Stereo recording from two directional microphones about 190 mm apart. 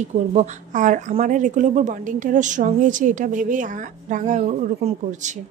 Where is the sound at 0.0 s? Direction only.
35° right (ahead or behind).